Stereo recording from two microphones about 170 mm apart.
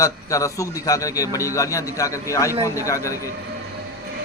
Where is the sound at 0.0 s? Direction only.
20° left (ahead or behind).